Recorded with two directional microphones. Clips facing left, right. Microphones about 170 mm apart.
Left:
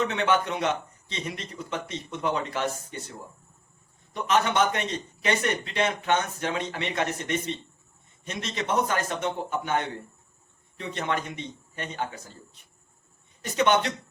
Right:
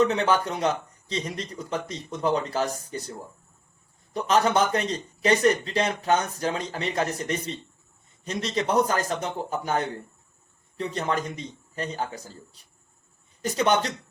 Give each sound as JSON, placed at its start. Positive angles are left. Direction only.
{"t": 0.0, "sound": "a man's voice", "side_deg": -35}
{"t": 4.1, "sound": "a man's voice", "side_deg": -35}